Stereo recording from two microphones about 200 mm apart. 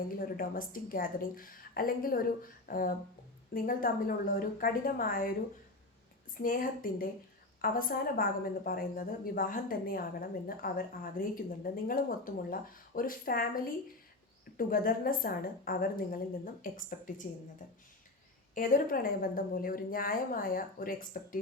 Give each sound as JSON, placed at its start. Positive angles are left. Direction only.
{"t": 0.0, "sound": "a woman's voice", "side_deg": 45}
{"t": 6.3, "sound": "a woman's voice", "side_deg": 45}